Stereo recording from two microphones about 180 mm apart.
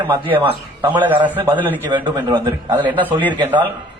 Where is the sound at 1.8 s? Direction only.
25° right (ahead or behind).